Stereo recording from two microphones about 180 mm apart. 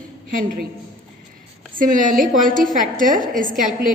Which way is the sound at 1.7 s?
45° right (ahead or behind).